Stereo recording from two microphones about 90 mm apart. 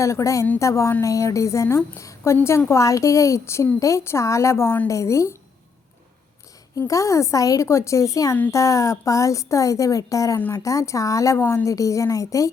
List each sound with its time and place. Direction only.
0.0 s a woman's voice: 35° left (ahead or behind)
6.7 s a woman's voice: 35° left (ahead or behind)